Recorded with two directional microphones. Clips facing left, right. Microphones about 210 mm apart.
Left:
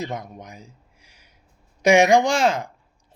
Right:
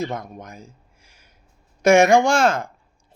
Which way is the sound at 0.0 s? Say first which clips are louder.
Right 3 dB; 15° left (ahead or behind).